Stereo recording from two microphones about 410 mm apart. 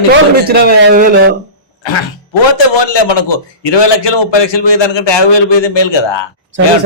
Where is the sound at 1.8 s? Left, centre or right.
Left.